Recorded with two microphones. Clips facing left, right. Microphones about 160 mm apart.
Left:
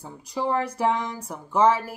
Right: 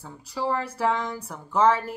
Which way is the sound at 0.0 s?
15° left (ahead or behind).